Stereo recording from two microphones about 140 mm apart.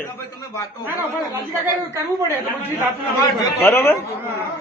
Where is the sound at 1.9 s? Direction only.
20° right (ahead or behind).